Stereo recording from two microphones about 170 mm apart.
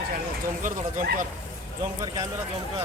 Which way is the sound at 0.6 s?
50° right (ahead or behind).